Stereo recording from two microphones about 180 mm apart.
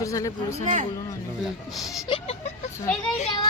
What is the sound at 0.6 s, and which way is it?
Speech, 45° right (ahead or behind).